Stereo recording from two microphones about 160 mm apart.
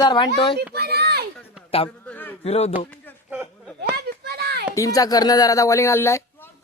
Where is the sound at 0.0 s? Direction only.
30° left (ahead or behind).